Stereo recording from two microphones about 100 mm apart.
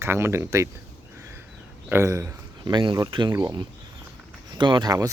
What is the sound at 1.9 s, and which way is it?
Speech, 30° right (ahead or behind).